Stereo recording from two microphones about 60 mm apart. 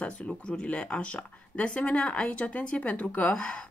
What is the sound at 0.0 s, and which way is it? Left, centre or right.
Speech, centre.